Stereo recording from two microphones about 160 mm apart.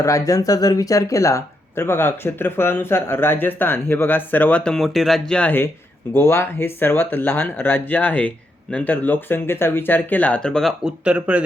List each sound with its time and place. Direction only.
0.0 s speech: 20° left (ahead or behind); by 11.4 s 5° right (ahead or behind)